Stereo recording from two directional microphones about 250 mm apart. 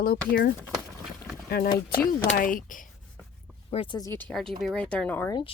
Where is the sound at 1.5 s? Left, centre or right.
Left.